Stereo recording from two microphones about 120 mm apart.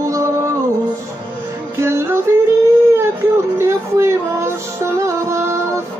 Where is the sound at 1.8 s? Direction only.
20° right (ahead or behind).